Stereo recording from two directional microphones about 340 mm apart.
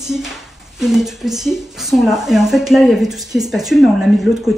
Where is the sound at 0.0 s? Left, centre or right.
Centre.